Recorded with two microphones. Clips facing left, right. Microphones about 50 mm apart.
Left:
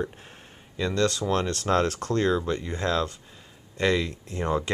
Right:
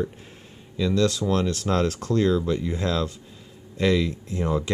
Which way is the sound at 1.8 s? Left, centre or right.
Left.